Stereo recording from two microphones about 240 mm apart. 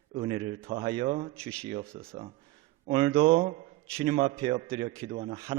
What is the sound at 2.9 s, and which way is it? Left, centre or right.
A man's voice, right.